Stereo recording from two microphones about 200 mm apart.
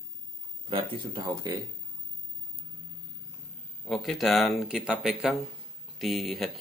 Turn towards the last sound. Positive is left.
turn(degrees=0)  # may be behind; listen again after turning